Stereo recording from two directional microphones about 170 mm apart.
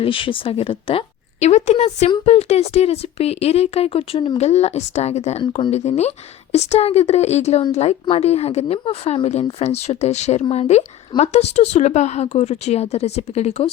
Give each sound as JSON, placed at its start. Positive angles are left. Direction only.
{"t": 0.0, "sound": "a woman's voice", "side_deg": 30}